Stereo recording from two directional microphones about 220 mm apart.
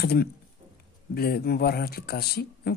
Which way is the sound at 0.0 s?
45° left (ahead or behind).